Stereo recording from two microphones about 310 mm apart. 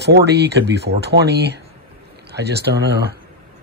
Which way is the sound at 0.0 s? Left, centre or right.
Right.